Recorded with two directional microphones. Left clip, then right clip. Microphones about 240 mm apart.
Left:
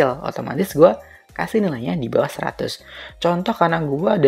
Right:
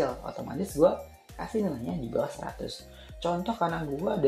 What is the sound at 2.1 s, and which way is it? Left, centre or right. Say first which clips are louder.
Speech: left 11 dB; left.